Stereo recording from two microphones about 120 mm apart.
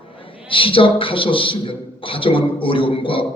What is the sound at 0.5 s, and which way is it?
A man's voice, 45° left (ahead or behind).